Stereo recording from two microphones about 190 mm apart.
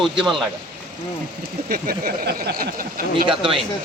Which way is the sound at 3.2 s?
25° right (ahead or behind).